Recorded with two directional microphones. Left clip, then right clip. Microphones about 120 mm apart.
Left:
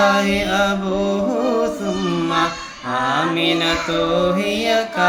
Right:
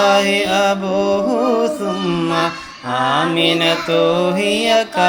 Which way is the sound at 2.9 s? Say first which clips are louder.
Right 3 dB; 45° right (ahead or behind).